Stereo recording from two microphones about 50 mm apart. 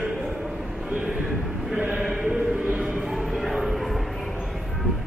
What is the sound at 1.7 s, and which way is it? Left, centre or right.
Speech, right.